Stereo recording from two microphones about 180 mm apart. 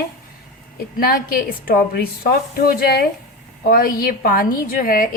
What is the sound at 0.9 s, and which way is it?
A woman's voice, 55° left (ahead or behind).